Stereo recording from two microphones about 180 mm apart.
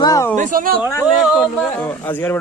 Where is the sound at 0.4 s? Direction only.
50° right (ahead or behind).